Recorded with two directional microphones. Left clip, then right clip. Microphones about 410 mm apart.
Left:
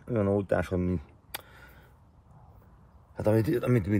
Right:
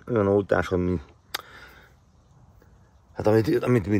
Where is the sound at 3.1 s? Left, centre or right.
Centre.